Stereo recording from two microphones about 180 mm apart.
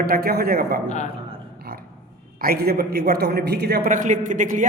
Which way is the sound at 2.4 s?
60° right (ahead or behind).